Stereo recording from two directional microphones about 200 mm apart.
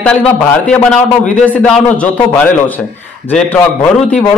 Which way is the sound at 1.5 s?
5° left (ahead or behind).